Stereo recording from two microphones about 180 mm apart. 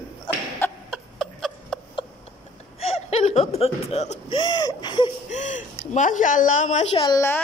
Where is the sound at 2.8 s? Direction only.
35° left (ahead or behind).